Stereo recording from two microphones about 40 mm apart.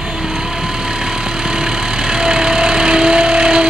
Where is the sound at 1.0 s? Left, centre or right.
Centre.